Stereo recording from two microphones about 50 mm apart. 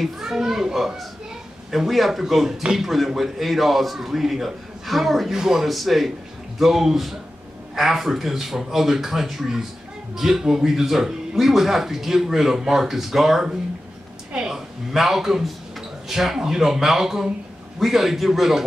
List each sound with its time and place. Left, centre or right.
0.0 s speech: centre